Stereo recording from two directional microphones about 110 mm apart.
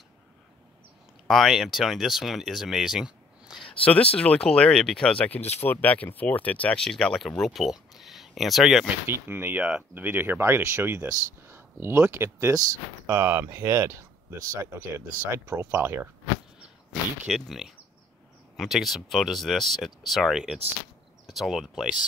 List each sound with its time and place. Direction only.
1.2 s speech: centre (ahead or behind)
3.8 s speech: 10° left (ahead or behind)
9.0 s speech: 20° right (ahead or behind)
17.3 s speech: centre (ahead or behind)